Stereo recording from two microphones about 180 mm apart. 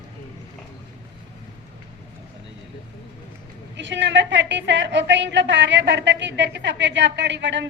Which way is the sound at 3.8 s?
80° right.